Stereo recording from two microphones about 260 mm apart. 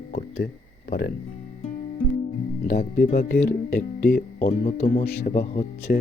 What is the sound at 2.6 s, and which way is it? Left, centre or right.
Speech, left.